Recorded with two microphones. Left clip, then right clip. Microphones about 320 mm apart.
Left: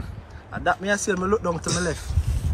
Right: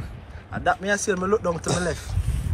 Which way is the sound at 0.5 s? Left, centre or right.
Left.